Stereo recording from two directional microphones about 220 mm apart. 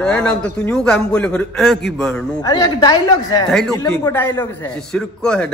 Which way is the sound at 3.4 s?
Centre (ahead or behind).